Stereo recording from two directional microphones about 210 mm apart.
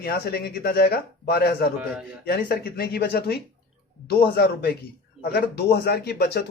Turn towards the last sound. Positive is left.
turn(degrees=50)  # may be behind; listen again after turning